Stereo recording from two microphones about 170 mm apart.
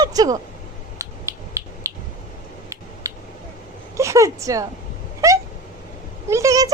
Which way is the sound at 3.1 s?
20° right (ahead or behind).